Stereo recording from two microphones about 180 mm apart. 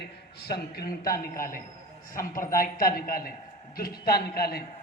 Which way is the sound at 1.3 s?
50° left (ahead or behind).